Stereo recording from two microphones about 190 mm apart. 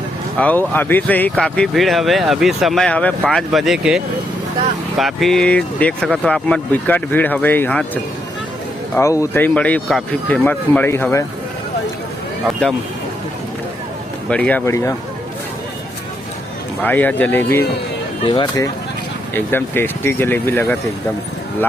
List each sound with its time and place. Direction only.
0.3 s speech: 10° left (ahead or behind)
9.0 s speech: 15° left (ahead or behind)
14.3 s speech: 5° left (ahead or behind)
16.8 s speech: 10° left (ahead or behind)
18.3 s speech: 20° left (ahead or behind)
19.3 s speech: 10° left (ahead or behind)